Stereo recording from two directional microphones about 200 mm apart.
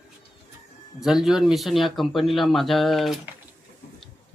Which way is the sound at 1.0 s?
Centre (ahead or behind).